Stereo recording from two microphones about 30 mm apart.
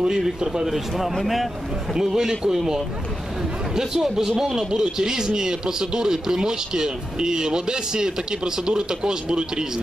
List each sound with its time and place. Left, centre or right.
0.7 s speech: centre
2.0 s speech: centre